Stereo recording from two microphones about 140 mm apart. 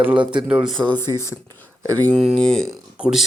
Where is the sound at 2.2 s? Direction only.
5° left (ahead or behind).